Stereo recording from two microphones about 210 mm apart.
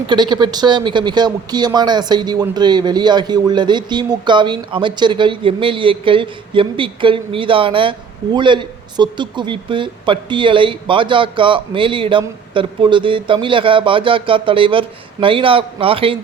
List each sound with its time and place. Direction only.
0.1 s speech: 20° right (ahead or behind)